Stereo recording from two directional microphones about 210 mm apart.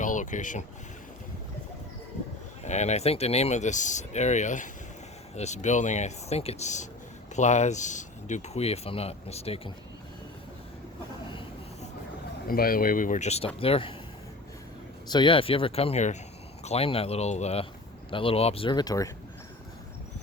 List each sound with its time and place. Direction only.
0.0 s boat: 35° left (ahead or behind)
2.6 s speech: 35° left (ahead or behind)
11.3 s vehicle: 25° left (ahead or behind)
12.5 s speech: 45° left (ahead or behind); by 13.9 s 25° left (ahead or behind)
15.1 s speech: 25° left (ahead or behind)